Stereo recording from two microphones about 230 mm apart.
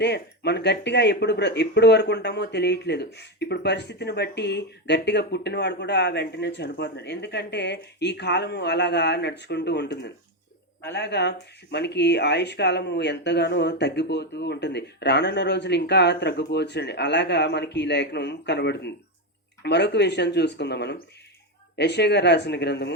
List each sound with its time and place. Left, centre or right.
0.0 s speech: left